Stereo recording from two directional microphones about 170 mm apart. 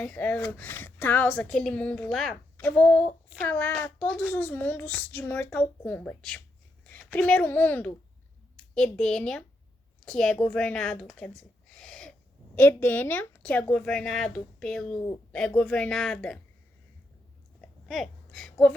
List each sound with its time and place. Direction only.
0.0 s a woman's voice: 10° left (ahead or behind)
17.8 s a woman's voice: centre (ahead or behind)